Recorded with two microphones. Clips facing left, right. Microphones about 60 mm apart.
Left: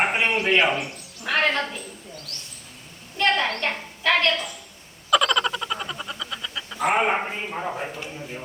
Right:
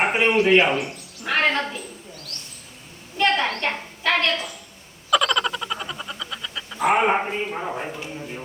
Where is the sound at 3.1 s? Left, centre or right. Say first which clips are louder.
Right 1 dB; centre.